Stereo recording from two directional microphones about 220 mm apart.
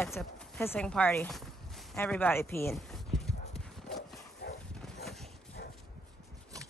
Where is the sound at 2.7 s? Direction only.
Centre (ahead or behind).